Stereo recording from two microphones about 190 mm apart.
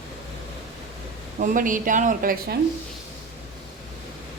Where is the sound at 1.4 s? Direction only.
45° right (ahead or behind).